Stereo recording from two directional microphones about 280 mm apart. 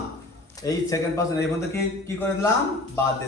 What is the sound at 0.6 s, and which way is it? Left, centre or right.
Speech, centre.